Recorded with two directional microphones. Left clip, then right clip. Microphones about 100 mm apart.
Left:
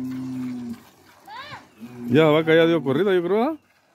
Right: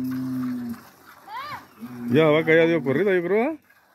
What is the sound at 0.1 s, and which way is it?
Livestock, 20° right (ahead or behind).